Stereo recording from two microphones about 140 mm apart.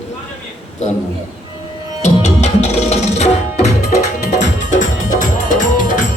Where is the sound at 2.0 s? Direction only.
55° left (ahead or behind).